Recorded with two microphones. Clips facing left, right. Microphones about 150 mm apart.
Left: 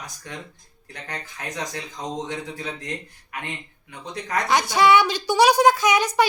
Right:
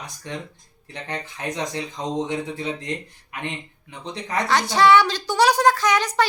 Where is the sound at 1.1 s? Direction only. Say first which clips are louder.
Right 4 dB; 25° right (ahead or behind).